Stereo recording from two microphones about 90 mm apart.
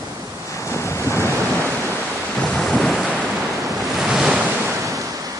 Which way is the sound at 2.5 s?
Centre (ahead or behind).